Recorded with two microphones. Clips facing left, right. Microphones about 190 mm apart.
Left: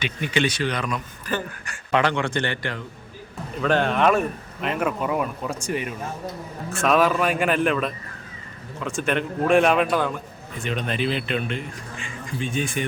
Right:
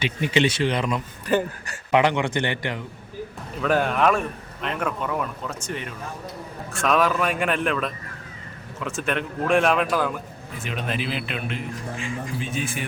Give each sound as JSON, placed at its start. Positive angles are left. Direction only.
{"t": 0.0, "sound": "speech", "side_deg": -25}
{"t": 3.6, "sound": "a man's voice", "side_deg": -5}